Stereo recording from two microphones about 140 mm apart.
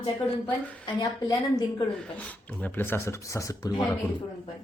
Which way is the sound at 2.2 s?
10° left (ahead or behind).